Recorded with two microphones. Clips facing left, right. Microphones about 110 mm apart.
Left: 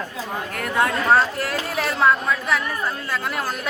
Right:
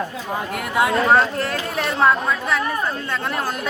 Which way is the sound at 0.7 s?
5° right (ahead or behind).